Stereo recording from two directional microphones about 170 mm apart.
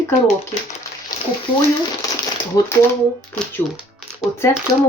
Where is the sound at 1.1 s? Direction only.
20° left (ahead or behind).